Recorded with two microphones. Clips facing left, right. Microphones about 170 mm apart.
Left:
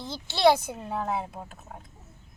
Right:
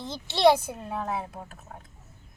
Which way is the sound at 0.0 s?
15° right (ahead or behind).